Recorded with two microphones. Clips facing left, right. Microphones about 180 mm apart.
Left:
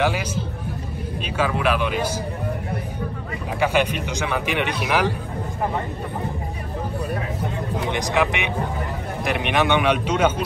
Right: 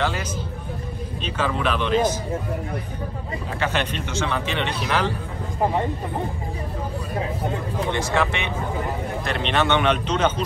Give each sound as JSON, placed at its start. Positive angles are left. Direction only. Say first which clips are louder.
{"t": 0.0, "sound": "speech", "louder": "left 3 dB", "side_deg": 10}
{"t": 3.5, "sound": "speech", "louder": "left 5 dB", "side_deg": 10}
{"t": 7.9, "sound": "speech", "louder": "left 1 dB", "side_deg": 15}